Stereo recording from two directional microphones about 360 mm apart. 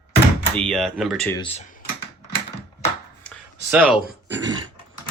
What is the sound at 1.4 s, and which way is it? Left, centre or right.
Speech, centre.